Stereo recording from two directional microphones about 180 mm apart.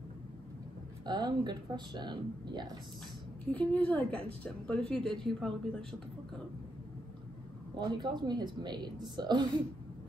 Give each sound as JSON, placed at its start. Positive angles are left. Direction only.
{"t": 1.0, "sound": "a woman's voice", "side_deg": -25}
{"t": 3.5, "sound": "a woman's voice", "side_deg": 10}
{"t": 7.7, "sound": "a woman's voice", "side_deg": -25}